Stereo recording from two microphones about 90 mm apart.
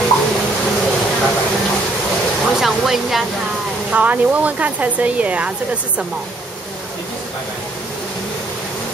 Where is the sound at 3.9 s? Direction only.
20° right (ahead or behind).